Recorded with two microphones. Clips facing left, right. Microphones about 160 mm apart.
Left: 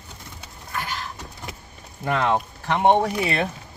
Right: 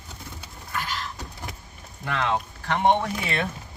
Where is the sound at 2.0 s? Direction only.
45° left (ahead or behind).